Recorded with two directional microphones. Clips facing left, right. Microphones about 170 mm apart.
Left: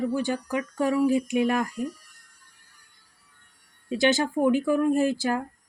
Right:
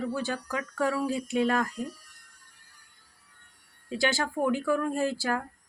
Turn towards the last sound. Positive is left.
turn(degrees=20)  # may be behind; listen again after turning